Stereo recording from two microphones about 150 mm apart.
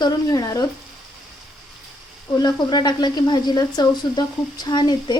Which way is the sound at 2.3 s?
30° left (ahead or behind).